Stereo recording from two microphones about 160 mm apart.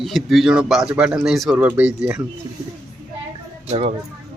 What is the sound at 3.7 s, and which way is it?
Speech, 40° right (ahead or behind).